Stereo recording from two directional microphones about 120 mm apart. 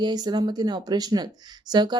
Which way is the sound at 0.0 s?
35° right (ahead or behind).